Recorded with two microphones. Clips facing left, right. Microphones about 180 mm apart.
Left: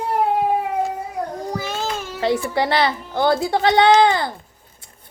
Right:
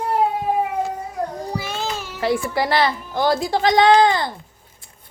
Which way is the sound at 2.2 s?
25° left (ahead or behind).